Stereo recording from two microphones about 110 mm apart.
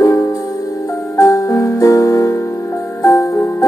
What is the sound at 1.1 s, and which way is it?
Music, 30° left (ahead or behind).